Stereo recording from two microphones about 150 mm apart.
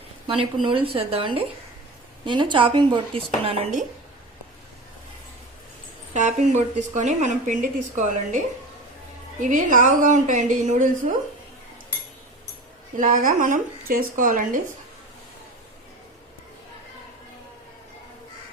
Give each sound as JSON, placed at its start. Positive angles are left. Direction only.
{"t": 0.3, "sound": "speech", "side_deg": -35}
{"t": 6.1, "sound": "a woman's voice", "side_deg": -55}
{"t": 9.4, "sound": "a woman's voice", "side_deg": -60}
{"t": 13.0, "sound": "a woman's voice", "side_deg": -65}